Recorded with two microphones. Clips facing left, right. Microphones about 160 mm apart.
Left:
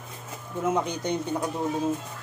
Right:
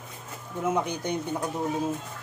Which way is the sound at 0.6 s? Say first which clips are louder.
Left 1 dB; 15° left (ahead or behind).